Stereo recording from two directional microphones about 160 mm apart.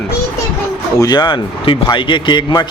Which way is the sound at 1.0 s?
30° left (ahead or behind).